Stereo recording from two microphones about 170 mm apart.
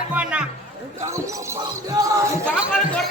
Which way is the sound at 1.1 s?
15° right (ahead or behind).